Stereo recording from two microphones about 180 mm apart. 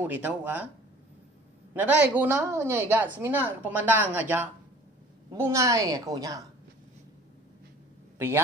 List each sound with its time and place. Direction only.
0.0 s a woman's voice: 10° right (ahead or behind)
1.7 s a woman's voice: 10° right (ahead or behind)